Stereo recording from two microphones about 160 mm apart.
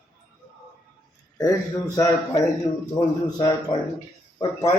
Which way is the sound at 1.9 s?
25° left (ahead or behind).